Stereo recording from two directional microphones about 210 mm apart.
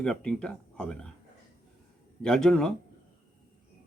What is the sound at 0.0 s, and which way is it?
Speech, 5° left (ahead or behind).